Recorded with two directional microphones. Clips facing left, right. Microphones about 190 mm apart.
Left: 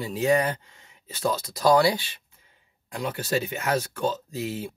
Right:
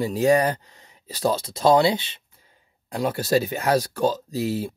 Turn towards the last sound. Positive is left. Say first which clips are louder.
# right 6 dB
turn(degrees=-35)  # may be behind; listen again after turning